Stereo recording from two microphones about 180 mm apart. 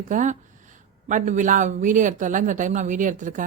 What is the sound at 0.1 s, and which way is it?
Speech, 45° right (ahead or behind).